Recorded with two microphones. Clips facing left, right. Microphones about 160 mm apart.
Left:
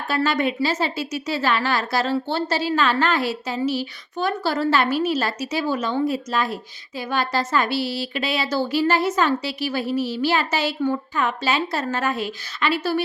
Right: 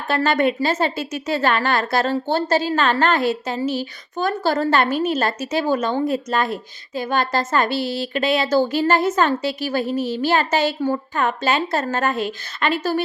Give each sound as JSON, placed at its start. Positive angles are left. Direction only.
{"t": 0.1, "sound": "a woman's voice", "side_deg": -50}